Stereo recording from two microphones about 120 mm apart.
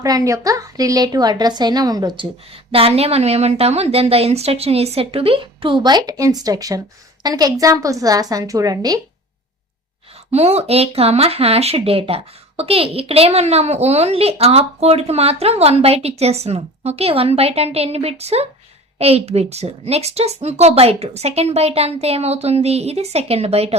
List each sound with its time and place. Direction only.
0.0 s a woman's voice: 30° right (ahead or behind)
2.7 s a woman's voice: 55° right (ahead or behind); by 9.0 s 30° right (ahead or behind)
10.3 s speech: 60° right (ahead or behind)